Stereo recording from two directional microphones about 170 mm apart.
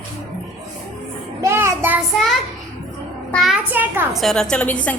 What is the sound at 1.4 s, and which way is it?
Speech, 15° right (ahead or behind).